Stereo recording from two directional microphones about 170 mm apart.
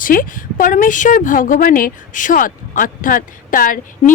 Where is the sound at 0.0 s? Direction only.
55° left (ahead or behind).